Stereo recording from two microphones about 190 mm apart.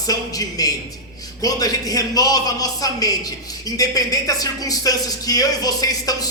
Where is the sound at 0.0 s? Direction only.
20° left (ahead or behind).